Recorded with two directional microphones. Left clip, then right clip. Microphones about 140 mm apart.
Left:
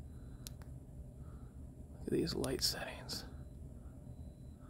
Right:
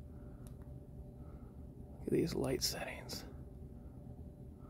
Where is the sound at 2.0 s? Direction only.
20° right (ahead or behind).